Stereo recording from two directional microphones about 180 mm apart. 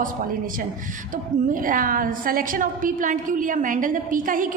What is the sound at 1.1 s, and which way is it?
A woman's voice, 50° right (ahead or behind).